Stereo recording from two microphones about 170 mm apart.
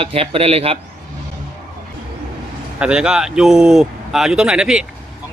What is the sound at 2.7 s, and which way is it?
Speech, 5° right (ahead or behind).